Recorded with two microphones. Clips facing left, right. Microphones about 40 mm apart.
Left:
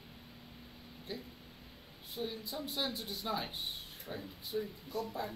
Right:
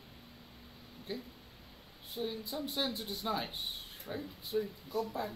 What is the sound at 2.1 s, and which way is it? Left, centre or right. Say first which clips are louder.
Speech: right 2 dB; centre.